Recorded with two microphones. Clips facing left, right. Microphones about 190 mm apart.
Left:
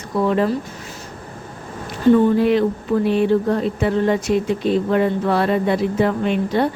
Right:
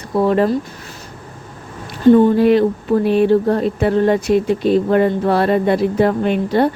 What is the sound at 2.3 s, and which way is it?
A woman's voice, 45° right (ahead or behind).